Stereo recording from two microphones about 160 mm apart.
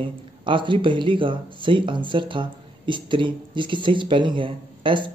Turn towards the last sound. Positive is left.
turn(degrees=-30)  # may be behind; listen again after turning